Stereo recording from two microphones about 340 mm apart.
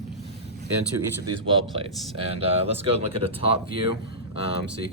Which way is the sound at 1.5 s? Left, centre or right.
Centre.